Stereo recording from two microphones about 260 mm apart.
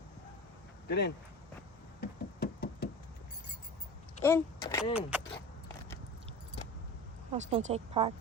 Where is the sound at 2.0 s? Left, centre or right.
Left.